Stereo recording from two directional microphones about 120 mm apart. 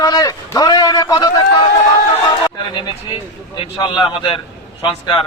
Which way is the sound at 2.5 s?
40° left (ahead or behind).